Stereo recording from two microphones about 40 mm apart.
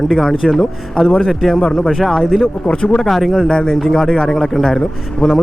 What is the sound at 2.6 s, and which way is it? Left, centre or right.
Speech, left.